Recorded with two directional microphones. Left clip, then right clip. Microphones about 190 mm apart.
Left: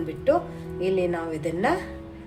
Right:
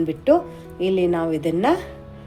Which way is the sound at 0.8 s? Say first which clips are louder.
Right 5 dB; 30° right (ahead or behind).